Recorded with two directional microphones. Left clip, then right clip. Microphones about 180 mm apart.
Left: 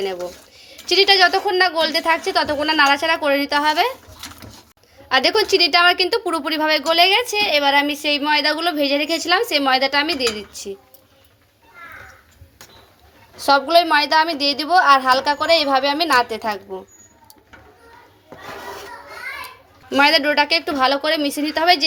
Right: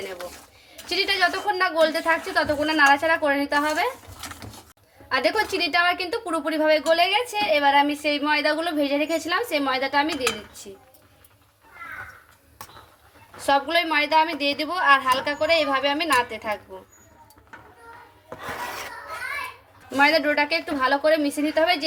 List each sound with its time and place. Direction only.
0.7 s a woman's voice: 50° left (ahead or behind)
5.0 s a woman's voice: 40° left (ahead or behind)
13.4 s a woman's voice: 50° left (ahead or behind)
19.9 s a woman's voice: 50° left (ahead or behind)